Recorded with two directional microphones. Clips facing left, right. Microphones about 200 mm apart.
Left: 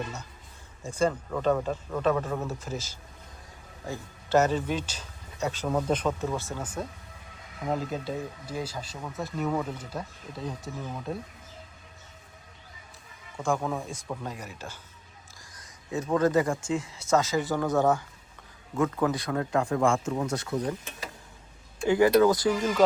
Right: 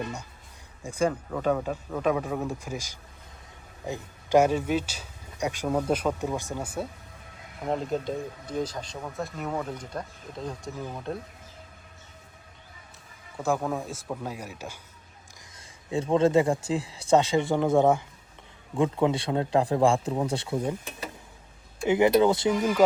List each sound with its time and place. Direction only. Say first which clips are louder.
0.8 s speech: even; 15° right (ahead or behind)
7.6 s speech: right 2 dB; centre (ahead or behind)
13.3 s speech: right 1 dB; 5° right (ahead or behind)
15.5 s speech: right 3 dB; 30° right (ahead or behind)
21.8 s speech: even; 20° right (ahead or behind)